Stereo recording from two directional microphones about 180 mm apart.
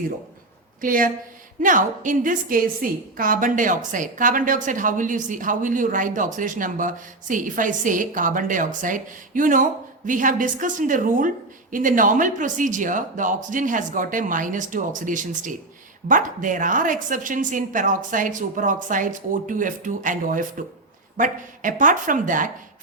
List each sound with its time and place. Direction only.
0.8 s a woman's voice: 50° right (ahead or behind)